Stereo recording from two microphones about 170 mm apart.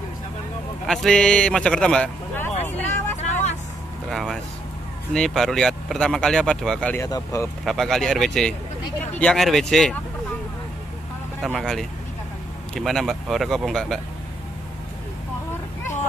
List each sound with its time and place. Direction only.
0.8 s speech: 5° left (ahead or behind)
3.2 s vehicle: 40° left (ahead or behind)
4.1 s a sound: centre (ahead or behind)
5.1 s speech: centre (ahead or behind)
7.0 s speech: 20° left (ahead or behind)
7.6 s speech: centre (ahead or behind)
11.4 s speech: centre (ahead or behind)